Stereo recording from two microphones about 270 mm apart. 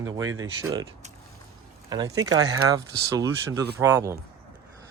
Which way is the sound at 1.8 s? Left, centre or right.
Centre.